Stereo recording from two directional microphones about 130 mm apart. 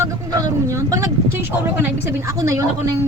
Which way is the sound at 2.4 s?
25° right (ahead or behind).